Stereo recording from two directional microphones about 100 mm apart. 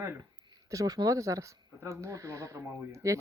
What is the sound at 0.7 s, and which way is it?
Speech, 35° right (ahead or behind).